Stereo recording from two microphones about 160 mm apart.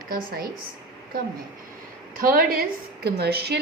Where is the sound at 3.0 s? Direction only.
85° right.